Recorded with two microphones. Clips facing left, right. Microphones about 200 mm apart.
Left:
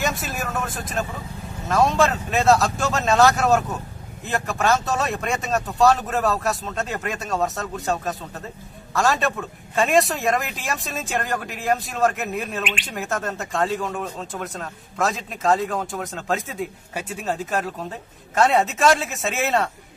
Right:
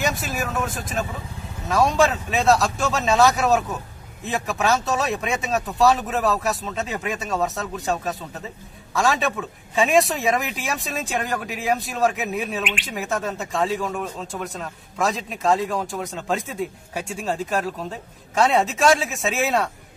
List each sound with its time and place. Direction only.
0.0 s vehicle: centre (ahead or behind)
1.7 s a man's voice: centre (ahead or behind)